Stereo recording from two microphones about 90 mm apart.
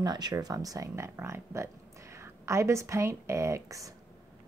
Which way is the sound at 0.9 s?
30° right (ahead or behind).